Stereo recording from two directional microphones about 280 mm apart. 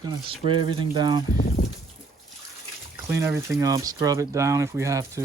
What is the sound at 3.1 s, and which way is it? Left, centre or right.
Speech, centre.